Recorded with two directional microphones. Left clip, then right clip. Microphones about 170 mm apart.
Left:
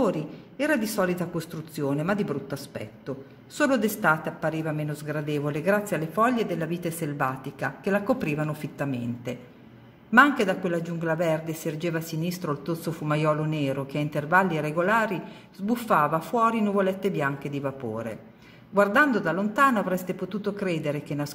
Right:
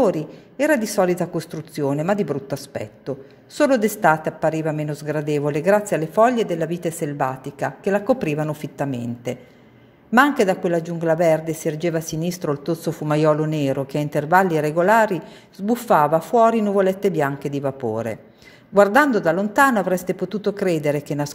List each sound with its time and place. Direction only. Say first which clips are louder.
0.0 s a man's voice: right 7 dB; 35° right (ahead or behind)